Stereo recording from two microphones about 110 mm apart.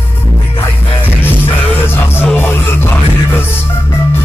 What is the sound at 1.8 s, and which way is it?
Music, 20° left (ahead or behind).